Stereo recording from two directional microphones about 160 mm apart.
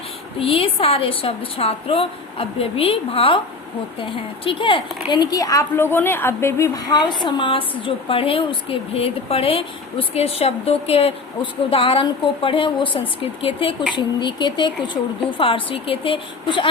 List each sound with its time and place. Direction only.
0.3 s a woman's voice: 35° left (ahead or behind)